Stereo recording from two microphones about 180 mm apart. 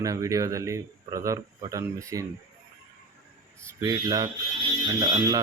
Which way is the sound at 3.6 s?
20° right (ahead or behind).